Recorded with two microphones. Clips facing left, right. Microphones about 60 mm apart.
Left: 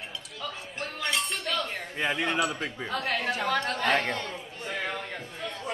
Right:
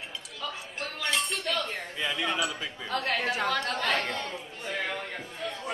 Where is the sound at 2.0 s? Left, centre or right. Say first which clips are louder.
Left 3 dB; left.